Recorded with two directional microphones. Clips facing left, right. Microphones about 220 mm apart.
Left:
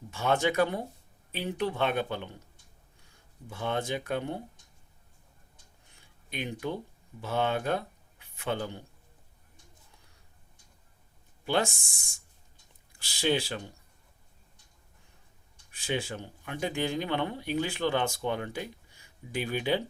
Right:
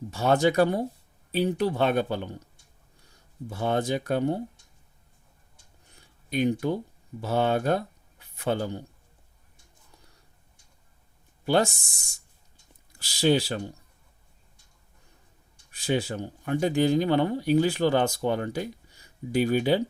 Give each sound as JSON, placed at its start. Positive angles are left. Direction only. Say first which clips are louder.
{"t": 0.1, "sound": "speech", "louder": "right 5 dB", "side_deg": -40}
{"t": 3.5, "sound": "speech", "louder": "right 5 dB", "side_deg": -40}
{"t": 5.9, "sound": "a sound", "louder": "right 11 dB", "side_deg": -40}
{"t": 7.2, "sound": "speech", "louder": "right 5 dB", "side_deg": -40}
{"t": 11.4, "sound": "speech", "louder": "right 5 dB", "side_deg": -40}
{"t": 15.7, "sound": "speech", "louder": "right 6 dB", "side_deg": -40}